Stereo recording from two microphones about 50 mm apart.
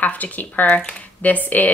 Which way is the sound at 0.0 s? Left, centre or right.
Left.